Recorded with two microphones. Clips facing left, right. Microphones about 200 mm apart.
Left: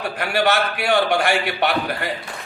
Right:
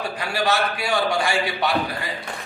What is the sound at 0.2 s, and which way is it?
A man's voice, 60° left (ahead or behind).